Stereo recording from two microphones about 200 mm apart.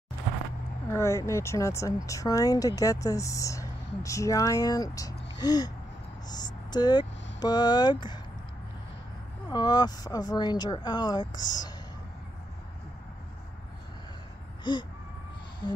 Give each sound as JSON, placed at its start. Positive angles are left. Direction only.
{"t": 0.9, "sound": "speech", "side_deg": 15}
{"t": 9.5, "sound": "speech", "side_deg": 20}
{"t": 14.6, "sound": "a sound", "side_deg": 20}